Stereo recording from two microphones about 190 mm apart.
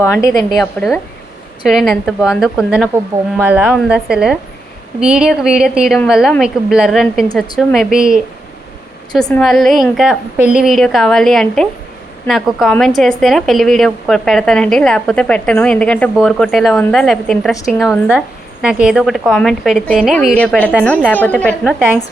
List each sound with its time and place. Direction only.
0.0 s a woman's voice: 15° left (ahead or behind)
0.3 s a woman's voice: centre (ahead or behind)
9.3 s a woman's voice: centre (ahead or behind)